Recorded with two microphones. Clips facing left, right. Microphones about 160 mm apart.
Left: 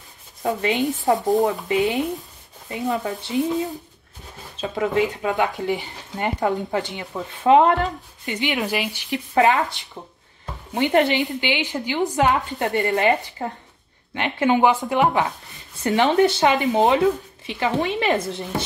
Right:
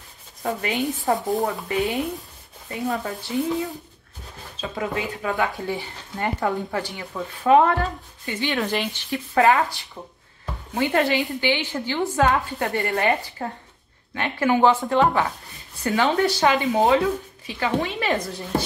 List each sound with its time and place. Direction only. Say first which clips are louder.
0.6 s speech: left 4 dB; 20° left (ahead or behind)
4.6 s speech: left 6 dB; 25° left (ahead or behind)
8.7 s speech: even; 5° left (ahead or behind)
9.1 s speech: even; 20° left (ahead or behind)